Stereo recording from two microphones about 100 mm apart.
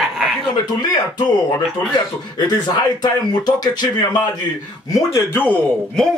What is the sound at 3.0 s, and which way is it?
Speech, 40° left (ahead or behind).